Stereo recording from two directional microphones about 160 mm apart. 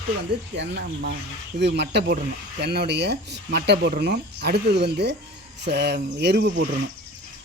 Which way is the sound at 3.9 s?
80° right.